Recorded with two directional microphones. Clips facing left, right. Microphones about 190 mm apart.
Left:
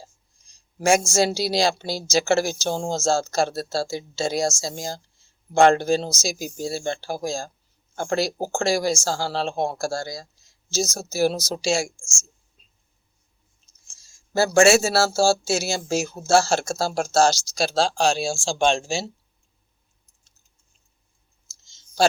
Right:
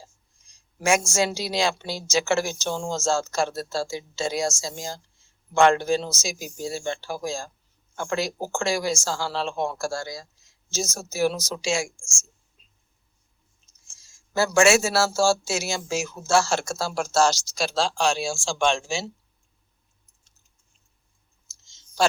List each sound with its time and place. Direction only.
0.8 s speech: 35° left (ahead or behind)
14.0 s speech: 35° left (ahead or behind)